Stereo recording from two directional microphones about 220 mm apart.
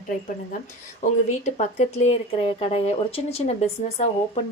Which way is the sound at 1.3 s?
30° left (ahead or behind).